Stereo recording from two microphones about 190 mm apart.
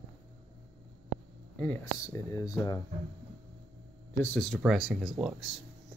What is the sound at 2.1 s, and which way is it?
Speech, 15° left (ahead or behind).